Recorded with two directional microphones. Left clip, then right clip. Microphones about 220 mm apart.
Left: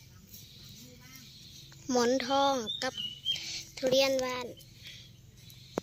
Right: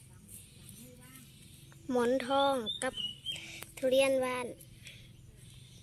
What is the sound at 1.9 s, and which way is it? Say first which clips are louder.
Speech: left 2 dB; 5° left (ahead or behind).